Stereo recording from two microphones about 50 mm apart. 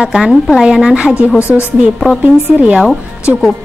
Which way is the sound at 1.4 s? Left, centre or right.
Left.